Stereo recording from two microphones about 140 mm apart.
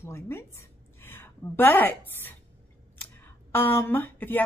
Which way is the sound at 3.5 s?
15° left (ahead or behind).